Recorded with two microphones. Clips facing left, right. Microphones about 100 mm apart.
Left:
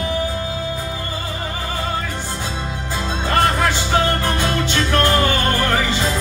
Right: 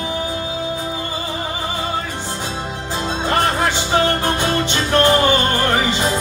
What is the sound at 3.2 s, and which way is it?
Music, 20° right (ahead or behind).